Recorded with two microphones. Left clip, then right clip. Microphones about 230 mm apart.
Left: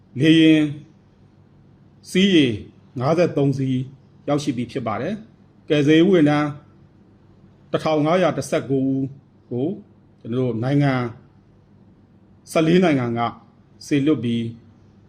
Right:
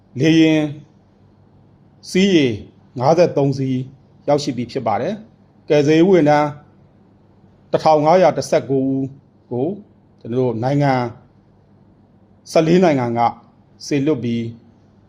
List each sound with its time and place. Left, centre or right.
0.1 s a man's voice: centre
2.0 s a man's voice: centre
7.7 s a man's voice: centre
10.2 s a man's voice: centre
12.5 s a man's voice: centre